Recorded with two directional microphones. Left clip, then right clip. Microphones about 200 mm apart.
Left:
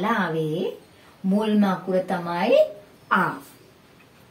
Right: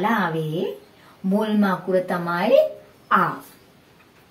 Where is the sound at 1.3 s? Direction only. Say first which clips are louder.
Right 1 dB; 10° left (ahead or behind).